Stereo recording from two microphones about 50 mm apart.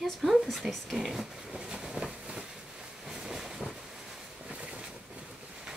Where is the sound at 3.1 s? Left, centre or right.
Centre.